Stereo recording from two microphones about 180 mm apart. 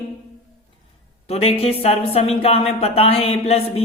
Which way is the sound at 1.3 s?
35° left (ahead or behind).